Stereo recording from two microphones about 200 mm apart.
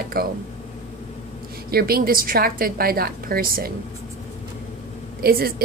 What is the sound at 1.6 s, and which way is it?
A woman's voice, 50° right (ahead or behind).